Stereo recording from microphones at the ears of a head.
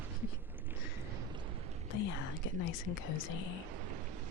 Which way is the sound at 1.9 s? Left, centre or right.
Left.